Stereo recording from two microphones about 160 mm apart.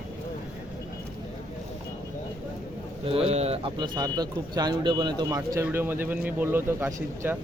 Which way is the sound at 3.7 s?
25° right (ahead or behind).